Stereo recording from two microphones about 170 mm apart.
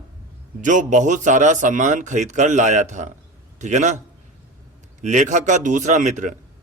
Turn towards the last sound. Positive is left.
turn(degrees=-45)  # may be behind; listen again after turning